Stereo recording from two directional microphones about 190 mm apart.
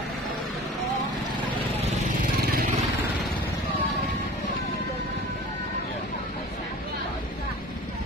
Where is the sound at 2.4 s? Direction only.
50° right (ahead or behind).